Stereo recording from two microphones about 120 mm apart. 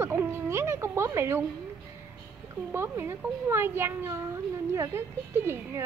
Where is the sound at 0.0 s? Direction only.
20° right (ahead or behind).